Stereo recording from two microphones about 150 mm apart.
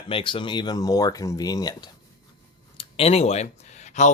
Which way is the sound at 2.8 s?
40° left (ahead or behind).